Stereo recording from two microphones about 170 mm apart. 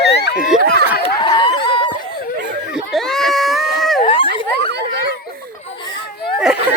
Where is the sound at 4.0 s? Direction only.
30° left (ahead or behind).